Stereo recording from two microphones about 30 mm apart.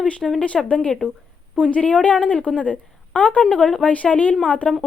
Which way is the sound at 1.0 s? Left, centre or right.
Left.